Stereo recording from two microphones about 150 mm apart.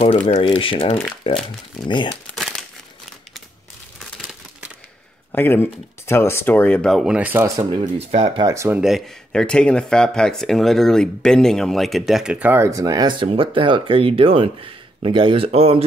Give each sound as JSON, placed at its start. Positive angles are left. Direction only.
{"t": 0.3, "sound": "speech", "side_deg": 40}
{"t": 2.3, "sound": "crumpling", "side_deg": 0}
{"t": 4.0, "sound": "crumpling", "side_deg": -5}
{"t": 5.3, "sound": "speech", "side_deg": 15}
{"t": 7.2, "sound": "speech", "side_deg": -10}
{"t": 7.4, "sound": "speech", "side_deg": -30}
{"t": 7.8, "sound": "speech", "side_deg": -45}
{"t": 8.5, "sound": "speech", "side_deg": -20}
{"t": 8.8, "sound": "speech", "side_deg": 0}